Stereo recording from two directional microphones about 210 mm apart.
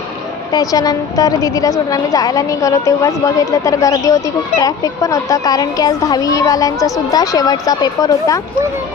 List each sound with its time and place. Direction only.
0.5 s a woman's voice: 15° left (ahead or behind)